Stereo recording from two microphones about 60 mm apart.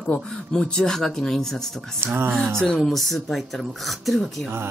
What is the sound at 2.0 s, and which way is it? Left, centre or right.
Speech, right.